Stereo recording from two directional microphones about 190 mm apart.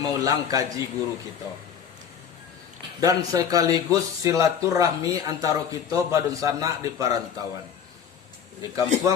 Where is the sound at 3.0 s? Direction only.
20° right (ahead or behind).